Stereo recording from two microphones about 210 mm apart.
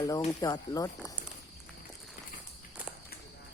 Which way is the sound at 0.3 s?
20° left (ahead or behind).